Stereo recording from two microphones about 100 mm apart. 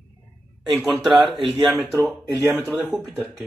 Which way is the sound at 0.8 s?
Centre (ahead or behind).